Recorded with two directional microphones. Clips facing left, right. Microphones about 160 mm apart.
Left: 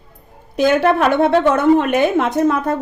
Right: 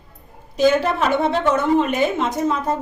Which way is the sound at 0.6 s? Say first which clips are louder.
Left 3 dB; 60° left (ahead or behind).